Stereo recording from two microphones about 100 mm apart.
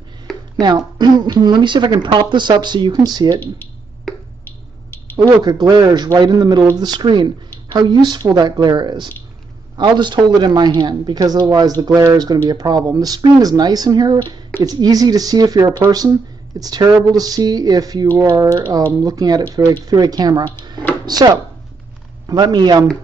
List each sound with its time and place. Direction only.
0.6 s speech: 40° right (ahead or behind)
5.3 s speech: 45° right (ahead or behind)